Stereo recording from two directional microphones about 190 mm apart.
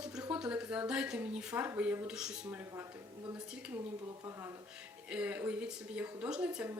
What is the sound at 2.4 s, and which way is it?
Speech, 15° right (ahead or behind).